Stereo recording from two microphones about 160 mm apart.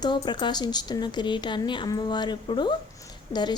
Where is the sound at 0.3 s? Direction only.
30° left (ahead or behind).